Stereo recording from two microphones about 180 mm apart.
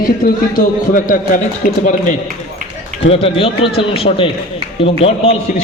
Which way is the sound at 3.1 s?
30° left (ahead or behind).